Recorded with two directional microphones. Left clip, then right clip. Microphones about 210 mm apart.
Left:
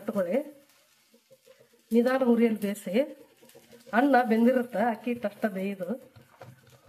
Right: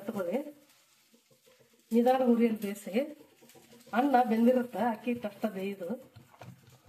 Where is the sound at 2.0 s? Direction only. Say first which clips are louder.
Left 2 dB; 40° left (ahead or behind).